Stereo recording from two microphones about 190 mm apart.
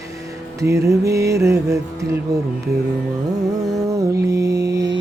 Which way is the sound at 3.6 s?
15° right (ahead or behind).